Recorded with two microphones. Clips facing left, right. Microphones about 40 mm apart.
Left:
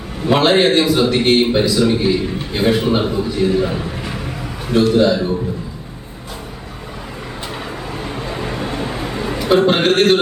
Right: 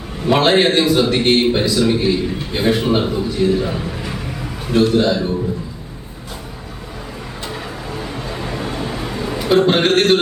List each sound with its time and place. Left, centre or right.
0.3 s a man's voice: centre
7.5 s vehicle: centre
8.4 s vehicle: left
9.1 s a sound: left
9.4 s a man's voice: centre